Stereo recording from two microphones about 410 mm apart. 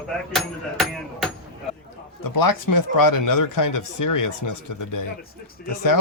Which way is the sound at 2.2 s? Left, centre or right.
Left.